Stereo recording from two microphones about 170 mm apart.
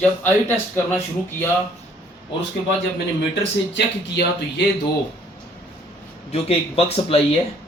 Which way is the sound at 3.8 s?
85° left.